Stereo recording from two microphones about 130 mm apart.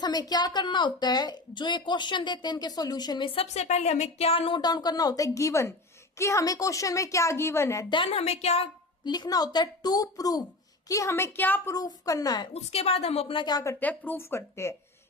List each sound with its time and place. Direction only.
0.0 s a woman's voice: 30° left (ahead or behind)
3.4 s a woman's voice: 60° left (ahead or behind); by 7.9 s 20° left (ahead or behind)
7.9 s a woman's voice: 40° left (ahead or behind)
9.0 s a woman's voice: 35° left (ahead or behind); by 11.7 s 15° left (ahead or behind)
11.7 s a woman's voice: 25° left (ahead or behind)
12.5 s a woman's voice: 50° left (ahead or behind); by 13.7 s 30° left (ahead or behind)
13.7 s a woman's voice: 15° left (ahead or behind)